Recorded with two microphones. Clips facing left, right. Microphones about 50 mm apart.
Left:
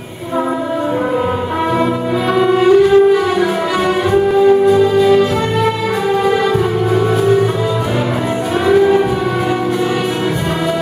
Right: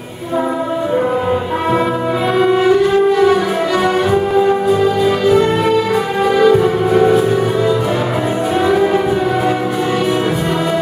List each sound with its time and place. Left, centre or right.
2.3 s music: centre
8.6 s civil defense siren: centre